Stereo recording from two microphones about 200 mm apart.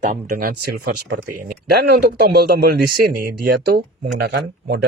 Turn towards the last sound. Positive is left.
turn(degrees=-55)  # may be behind; listen again after turning